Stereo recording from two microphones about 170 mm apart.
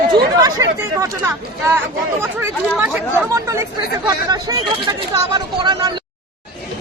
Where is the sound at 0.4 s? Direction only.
20° right (ahead or behind).